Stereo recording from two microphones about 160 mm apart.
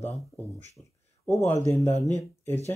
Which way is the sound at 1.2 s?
15° left (ahead or behind).